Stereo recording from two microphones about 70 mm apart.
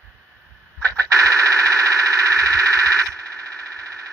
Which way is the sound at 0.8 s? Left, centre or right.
Right.